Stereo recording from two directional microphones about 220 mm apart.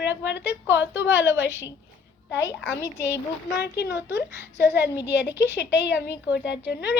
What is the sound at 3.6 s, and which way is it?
Speech, 50° left (ahead or behind).